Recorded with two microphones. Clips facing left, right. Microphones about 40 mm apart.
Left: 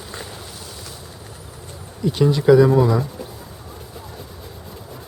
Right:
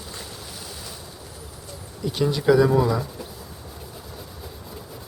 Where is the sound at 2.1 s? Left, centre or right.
Centre.